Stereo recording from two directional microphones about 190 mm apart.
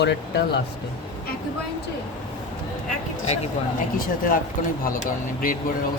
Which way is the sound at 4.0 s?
45° left (ahead or behind).